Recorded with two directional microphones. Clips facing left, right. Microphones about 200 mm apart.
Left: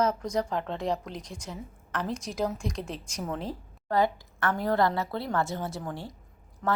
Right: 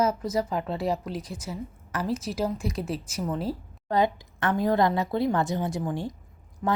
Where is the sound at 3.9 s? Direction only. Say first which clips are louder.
Right 2 dB; 20° right (ahead or behind).